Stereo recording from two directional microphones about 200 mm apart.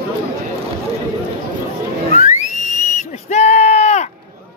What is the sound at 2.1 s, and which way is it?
Music, 40° left (ahead or behind).